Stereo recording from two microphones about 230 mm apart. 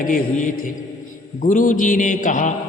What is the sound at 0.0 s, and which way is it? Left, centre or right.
A man's voice, left.